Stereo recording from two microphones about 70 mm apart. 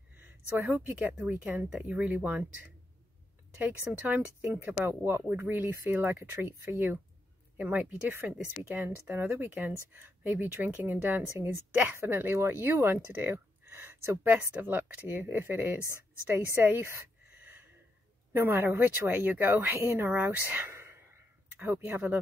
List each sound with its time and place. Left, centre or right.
0.6 s a woman's voice: right
7.5 s speech: right
8.1 s a woman's voice: right
18.3 s a woman's voice: right